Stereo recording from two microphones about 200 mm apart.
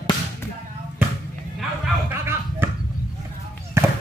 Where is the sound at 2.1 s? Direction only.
10° right (ahead or behind).